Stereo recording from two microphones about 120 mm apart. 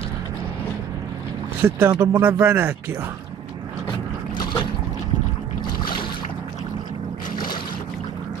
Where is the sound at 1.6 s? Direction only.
20° right (ahead or behind).